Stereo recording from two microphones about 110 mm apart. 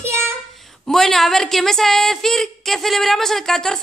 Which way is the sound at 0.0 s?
25° right (ahead or behind).